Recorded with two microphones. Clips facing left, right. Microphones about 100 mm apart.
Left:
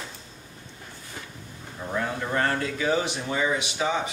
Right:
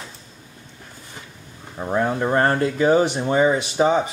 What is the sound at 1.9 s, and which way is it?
Speech, 45° right (ahead or behind).